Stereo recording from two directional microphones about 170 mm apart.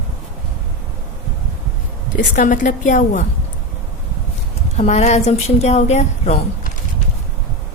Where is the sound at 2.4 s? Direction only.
50° left (ahead or behind).